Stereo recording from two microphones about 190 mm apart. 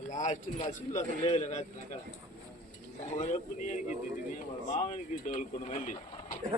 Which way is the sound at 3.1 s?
40° left (ahead or behind).